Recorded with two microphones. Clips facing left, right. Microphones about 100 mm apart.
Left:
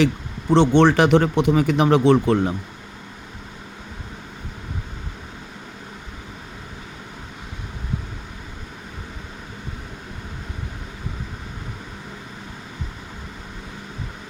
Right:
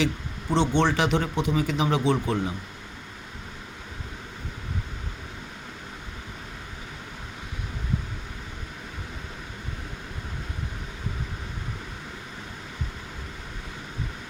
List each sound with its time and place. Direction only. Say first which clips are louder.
0.5 s speech: left 8 dB; 65° left (ahead or behind)